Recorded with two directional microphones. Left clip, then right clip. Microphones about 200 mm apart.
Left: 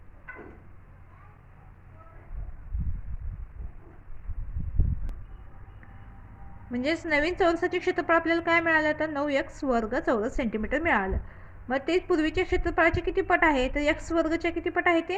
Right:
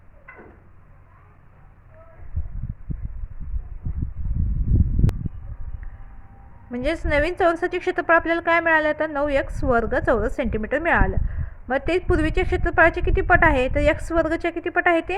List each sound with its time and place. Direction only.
6.7 s a woman's voice: 35° right (ahead or behind)